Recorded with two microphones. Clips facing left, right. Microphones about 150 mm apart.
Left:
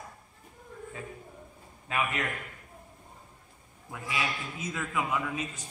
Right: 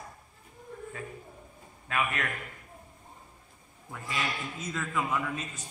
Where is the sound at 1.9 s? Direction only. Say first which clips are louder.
Even; 20° left (ahead or behind).